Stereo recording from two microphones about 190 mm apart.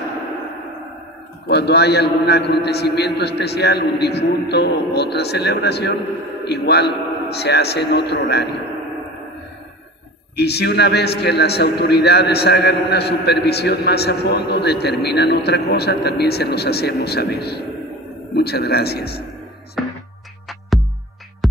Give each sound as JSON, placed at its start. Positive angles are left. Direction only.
{"t": 1.5, "sound": "a man's voice", "side_deg": 60}
{"t": 10.3, "sound": "a man's voice", "side_deg": 60}
{"t": 19.8, "sound": "music", "side_deg": 0}